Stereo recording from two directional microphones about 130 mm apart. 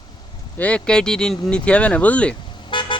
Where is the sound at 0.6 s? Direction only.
10° left (ahead or behind).